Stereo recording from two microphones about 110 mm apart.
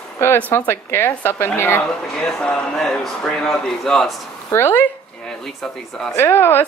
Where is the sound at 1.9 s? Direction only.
5° left (ahead or behind).